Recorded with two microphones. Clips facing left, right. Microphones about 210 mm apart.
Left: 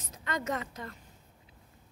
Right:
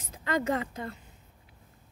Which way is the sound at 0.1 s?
30° right (ahead or behind).